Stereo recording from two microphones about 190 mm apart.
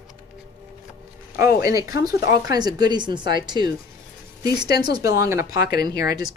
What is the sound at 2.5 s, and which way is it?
Speech, 20° right (ahead or behind).